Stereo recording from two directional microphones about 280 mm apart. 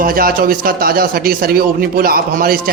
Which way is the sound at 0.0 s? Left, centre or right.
Right.